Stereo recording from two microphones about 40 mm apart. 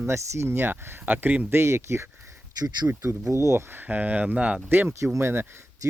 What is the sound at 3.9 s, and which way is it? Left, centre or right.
Speech, right.